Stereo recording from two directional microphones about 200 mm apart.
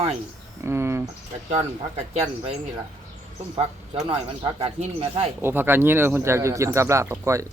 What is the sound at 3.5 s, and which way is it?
Speech, 25° right (ahead or behind).